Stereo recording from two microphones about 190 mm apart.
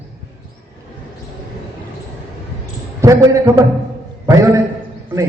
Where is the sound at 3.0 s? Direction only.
15° right (ahead or behind).